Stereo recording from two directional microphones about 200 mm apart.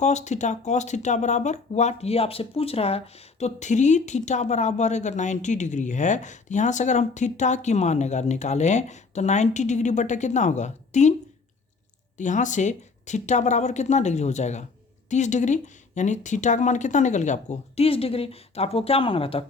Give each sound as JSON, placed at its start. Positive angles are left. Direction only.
{"t": 0.0, "sound": "speech", "side_deg": 35}
{"t": 12.1, "sound": "speech", "side_deg": 40}